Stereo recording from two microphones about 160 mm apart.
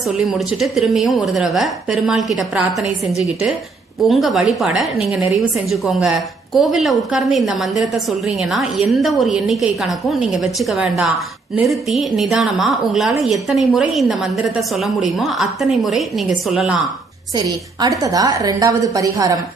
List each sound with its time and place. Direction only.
0.3 s a woman's voice: centre (ahead or behind)
4.1 s a woman's voice: centre (ahead or behind)
17.3 s a woman's voice: 25° right (ahead or behind)